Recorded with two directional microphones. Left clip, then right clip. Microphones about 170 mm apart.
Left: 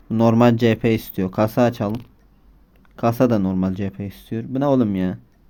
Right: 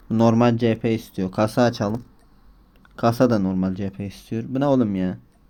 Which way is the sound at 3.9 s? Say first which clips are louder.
Left 1 dB; centre (ahead or behind).